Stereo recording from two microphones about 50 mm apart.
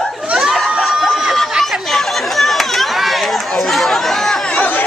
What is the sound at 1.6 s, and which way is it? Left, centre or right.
Run, centre.